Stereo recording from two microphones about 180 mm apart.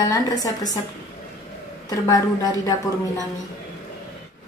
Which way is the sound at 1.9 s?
20° left (ahead or behind).